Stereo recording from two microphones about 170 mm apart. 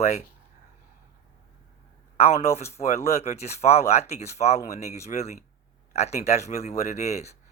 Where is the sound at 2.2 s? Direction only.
40° left (ahead or behind).